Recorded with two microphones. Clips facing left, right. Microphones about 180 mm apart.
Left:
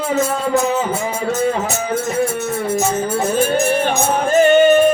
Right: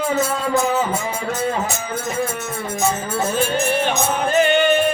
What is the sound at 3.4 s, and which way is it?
Music, 45° left (ahead or behind).